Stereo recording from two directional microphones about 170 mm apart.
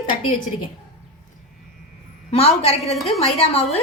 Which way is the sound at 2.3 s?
35° left (ahead or behind).